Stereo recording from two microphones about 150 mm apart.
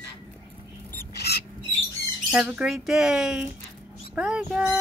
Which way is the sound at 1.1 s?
90° left.